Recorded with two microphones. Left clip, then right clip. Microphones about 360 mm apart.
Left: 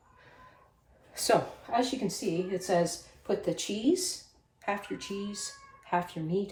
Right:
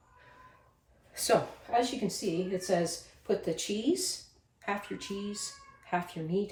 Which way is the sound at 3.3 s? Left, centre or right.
Centre.